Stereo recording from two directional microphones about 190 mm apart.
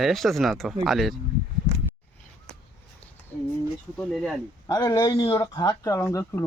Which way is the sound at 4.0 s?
Centre (ahead or behind).